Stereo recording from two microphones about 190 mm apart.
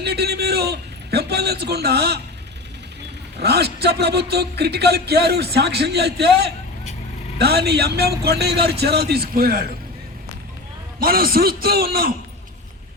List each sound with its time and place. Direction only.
0.0 s a man's voice: 60° right (ahead or behind)
3.4 s speech: 60° right (ahead or behind)
11.0 s a man's voice: 50° right (ahead or behind)